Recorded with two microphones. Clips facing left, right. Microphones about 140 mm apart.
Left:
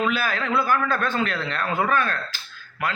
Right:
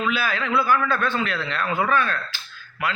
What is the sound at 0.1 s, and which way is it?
Speech, 45° left (ahead or behind).